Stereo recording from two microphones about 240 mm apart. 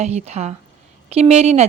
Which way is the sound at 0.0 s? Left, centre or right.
Right.